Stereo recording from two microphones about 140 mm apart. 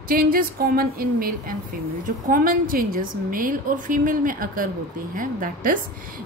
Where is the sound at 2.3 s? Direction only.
80° right.